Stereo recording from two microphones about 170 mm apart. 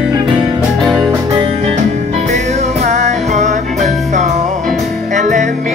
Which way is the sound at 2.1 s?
40° right (ahead or behind).